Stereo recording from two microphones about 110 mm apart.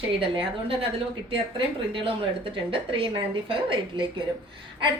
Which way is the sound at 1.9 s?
55° right (ahead or behind).